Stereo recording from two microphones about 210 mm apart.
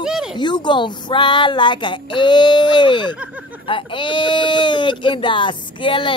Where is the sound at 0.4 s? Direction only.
20° left (ahead or behind).